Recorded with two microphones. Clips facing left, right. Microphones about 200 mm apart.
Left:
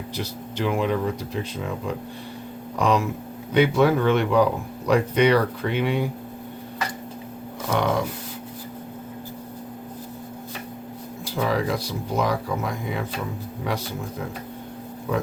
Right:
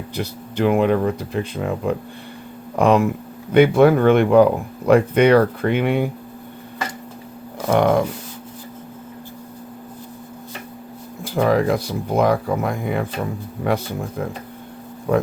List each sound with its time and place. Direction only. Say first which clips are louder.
0.2 s speech: right 7 dB; 55° right (ahead or behind)
7.7 s dog: right 7 dB; 50° right (ahead or behind)
11.3 s speech: right 7 dB; 55° right (ahead or behind)
13.7 s dog: right 7 dB; 55° right (ahead or behind)
15.1 s dog: right 7 dB; 50° right (ahead or behind)